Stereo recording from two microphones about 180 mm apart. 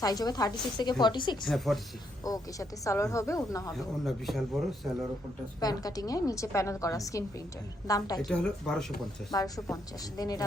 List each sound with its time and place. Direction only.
0.0 s speech: 20° left (ahead or behind)
1.5 s a man's voice: centre (ahead or behind)
2.2 s speech: 20° left (ahead or behind)
3.7 s a man's voice: centre (ahead or behind)
5.5 s a woman's voice: 20° left (ahead or behind)
8.3 s a man's voice: 5° left (ahead or behind)
9.3 s speech: 20° left (ahead or behind)